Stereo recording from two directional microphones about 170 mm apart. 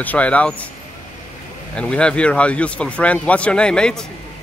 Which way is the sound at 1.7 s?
5° left (ahead or behind).